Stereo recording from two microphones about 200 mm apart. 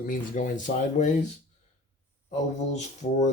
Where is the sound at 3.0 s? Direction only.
35° left (ahead or behind).